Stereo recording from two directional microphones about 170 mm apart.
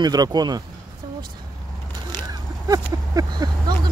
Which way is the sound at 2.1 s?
20° right (ahead or behind).